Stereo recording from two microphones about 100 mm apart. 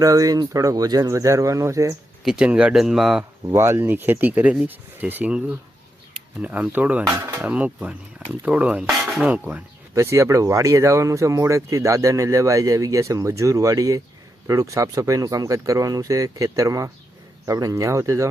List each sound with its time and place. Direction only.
0.0 s speech: 35° right (ahead or behind)
2.2 s speech: 10° right (ahead or behind)
3.5 s speech: 25° right (ahead or behind)
9.9 s speech: 30° right (ahead or behind)